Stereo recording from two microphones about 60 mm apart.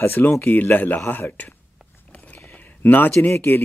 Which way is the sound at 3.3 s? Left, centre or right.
Left.